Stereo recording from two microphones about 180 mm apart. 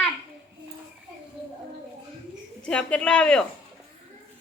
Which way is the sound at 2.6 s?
5° left (ahead or behind).